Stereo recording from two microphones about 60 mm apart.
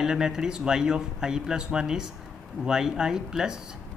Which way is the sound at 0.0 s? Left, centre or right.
Centre.